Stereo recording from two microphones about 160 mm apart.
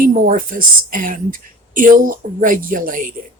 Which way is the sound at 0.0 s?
60° right (ahead or behind).